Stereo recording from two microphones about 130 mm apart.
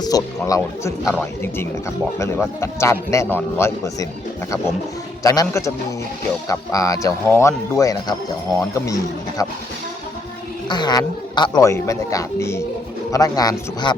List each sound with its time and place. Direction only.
0.0 s speech: 25° left (ahead or behind)
5.2 s speech: 25° left (ahead or behind)
10.7 s speech: 35° left (ahead or behind)